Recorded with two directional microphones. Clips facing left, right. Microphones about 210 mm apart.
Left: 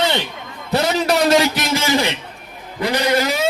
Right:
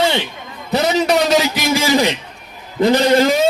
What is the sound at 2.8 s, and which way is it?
Speech, 25° right (ahead or behind).